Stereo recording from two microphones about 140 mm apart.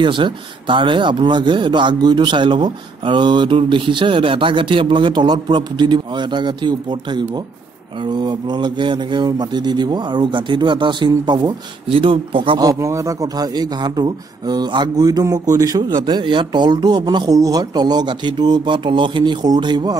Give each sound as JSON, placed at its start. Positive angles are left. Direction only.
{"t": 0.0, "sound": "speech", "side_deg": -35}
{"t": 12.6, "sound": "a man's voice", "side_deg": -20}